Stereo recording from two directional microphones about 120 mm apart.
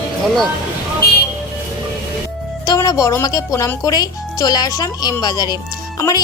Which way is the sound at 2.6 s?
30° left (ahead or behind).